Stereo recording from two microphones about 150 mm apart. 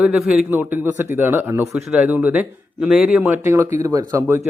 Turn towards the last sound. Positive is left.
turn(degrees=-20)  # may be behind; listen again after turning